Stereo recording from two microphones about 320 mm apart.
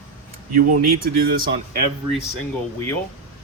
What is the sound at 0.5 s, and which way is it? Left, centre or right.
Speech, right.